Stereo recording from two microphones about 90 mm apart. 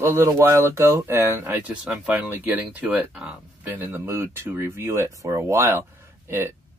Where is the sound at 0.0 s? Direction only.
30° right (ahead or behind).